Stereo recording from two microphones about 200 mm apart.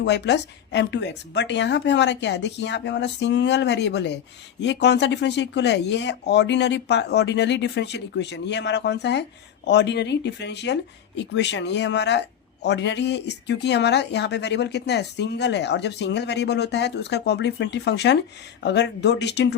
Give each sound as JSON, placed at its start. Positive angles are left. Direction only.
{"t": 0.0, "sound": "a woman's voice", "side_deg": 60}